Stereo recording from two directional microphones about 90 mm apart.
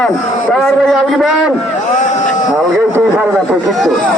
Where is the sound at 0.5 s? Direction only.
Centre (ahead or behind).